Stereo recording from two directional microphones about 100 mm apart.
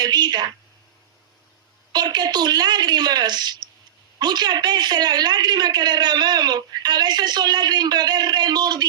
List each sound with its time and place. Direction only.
0.0 s a woman's voice: 45° right (ahead or behind)
1.9 s a woman's voice: 45° right (ahead or behind)